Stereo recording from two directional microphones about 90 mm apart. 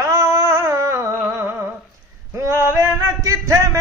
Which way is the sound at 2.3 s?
35° right (ahead or behind).